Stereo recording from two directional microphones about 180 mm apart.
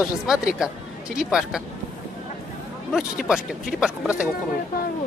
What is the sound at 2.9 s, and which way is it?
Speech, 5° right (ahead or behind).